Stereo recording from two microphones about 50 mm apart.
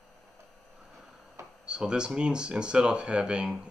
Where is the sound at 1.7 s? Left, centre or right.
Centre.